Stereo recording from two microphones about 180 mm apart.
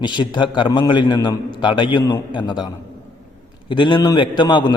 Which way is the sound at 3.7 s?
25° left (ahead or behind).